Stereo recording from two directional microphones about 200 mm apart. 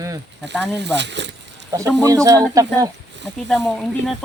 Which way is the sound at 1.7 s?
15° right (ahead or behind).